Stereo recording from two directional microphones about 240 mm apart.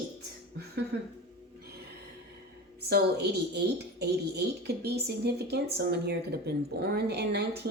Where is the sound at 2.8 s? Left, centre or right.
Right.